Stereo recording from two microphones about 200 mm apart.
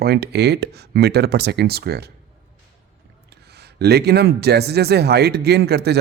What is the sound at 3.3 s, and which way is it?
Speech, 55° right (ahead or behind).